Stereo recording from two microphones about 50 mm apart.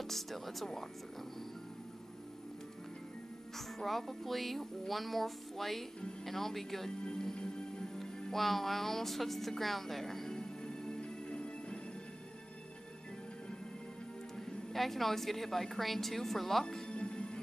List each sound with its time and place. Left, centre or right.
0.0 s music: centre
3.5 s music: centre; by 11.8 s left
14.3 s a woman's voice: centre
16.9 s music: left